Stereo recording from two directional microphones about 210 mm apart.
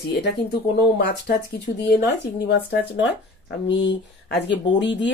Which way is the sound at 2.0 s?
55° left (ahead or behind).